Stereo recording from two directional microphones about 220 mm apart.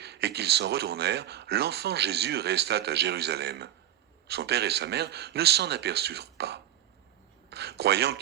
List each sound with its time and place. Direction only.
0.0 s speech: 50° right (ahead or behind)